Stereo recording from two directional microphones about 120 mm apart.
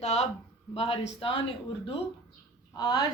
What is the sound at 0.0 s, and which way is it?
Speech, 65° left (ahead or behind).